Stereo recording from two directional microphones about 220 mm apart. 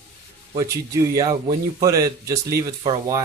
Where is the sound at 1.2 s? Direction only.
15° right (ahead or behind).